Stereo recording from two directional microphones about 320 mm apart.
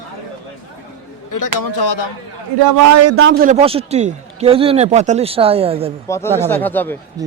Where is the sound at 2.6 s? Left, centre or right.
Right.